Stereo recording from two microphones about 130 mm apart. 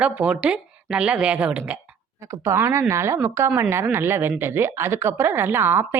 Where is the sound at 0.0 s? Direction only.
10° right (ahead or behind).